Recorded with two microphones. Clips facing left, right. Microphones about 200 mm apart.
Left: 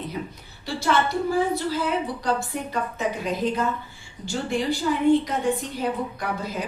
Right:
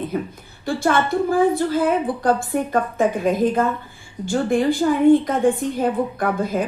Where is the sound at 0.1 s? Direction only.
50° right (ahead or behind).